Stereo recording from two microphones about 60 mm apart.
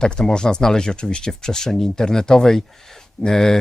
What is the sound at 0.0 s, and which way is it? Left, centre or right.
Speech, centre.